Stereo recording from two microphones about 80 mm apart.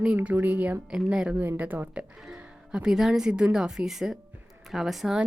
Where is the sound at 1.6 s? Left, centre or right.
Right.